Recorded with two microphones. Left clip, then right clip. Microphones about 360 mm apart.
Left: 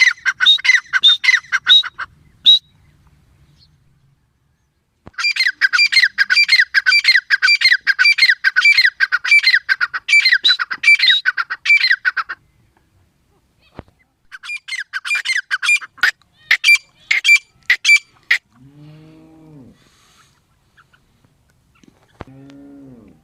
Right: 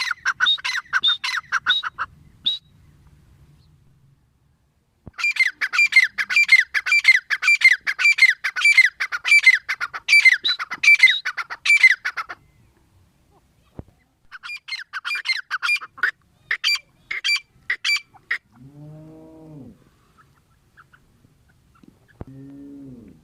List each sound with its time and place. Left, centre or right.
0.2 s chicken: centre
1.6 s bird: centre
2.4 s whistle: centre
5.1 s squawk: centre
14.4 s squawk: centre